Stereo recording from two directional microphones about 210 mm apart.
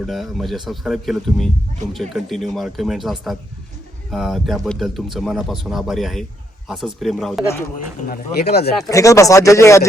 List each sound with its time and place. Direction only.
0.0 s speech: centre (ahead or behind)
8.0 s speech: 45° left (ahead or behind)
8.9 s speech: 15° left (ahead or behind)